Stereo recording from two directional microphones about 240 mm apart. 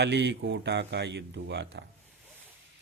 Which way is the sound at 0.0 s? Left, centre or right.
Right.